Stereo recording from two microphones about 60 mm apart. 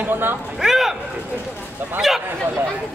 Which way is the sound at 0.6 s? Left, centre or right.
Centre.